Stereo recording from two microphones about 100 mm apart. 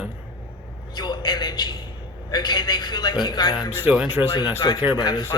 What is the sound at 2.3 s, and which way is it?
A man's voice, 45° left (ahead or behind).